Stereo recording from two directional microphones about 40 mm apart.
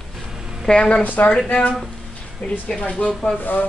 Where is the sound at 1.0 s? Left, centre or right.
Left.